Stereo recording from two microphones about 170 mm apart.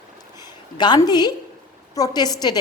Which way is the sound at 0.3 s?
25° left (ahead or behind).